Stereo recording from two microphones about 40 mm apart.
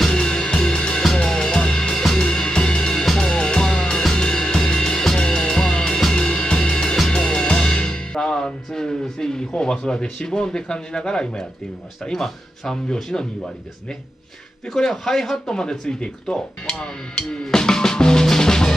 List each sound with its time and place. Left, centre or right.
0.0 s music: centre
6.2 s music: left
9.6 s speech: centre
14.7 s speech: centre